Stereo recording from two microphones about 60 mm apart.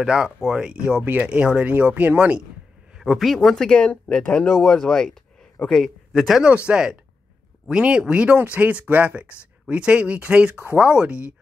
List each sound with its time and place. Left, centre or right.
0.0 s speech: centre
3.0 s speech: centre
4.6 s speech: centre
6.4 s speech: centre